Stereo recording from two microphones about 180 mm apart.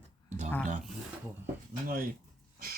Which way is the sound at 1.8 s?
50° right (ahead or behind).